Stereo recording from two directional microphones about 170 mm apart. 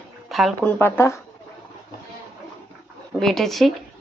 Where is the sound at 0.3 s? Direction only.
Centre (ahead or behind).